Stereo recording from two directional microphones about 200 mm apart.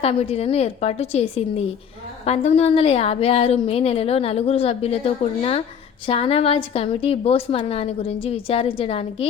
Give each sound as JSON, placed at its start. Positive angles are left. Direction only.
{"t": 0.0, "sound": "a woman's voice", "side_deg": 30}